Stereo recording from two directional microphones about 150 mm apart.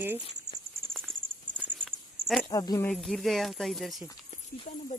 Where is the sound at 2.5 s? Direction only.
25° left (ahead or behind).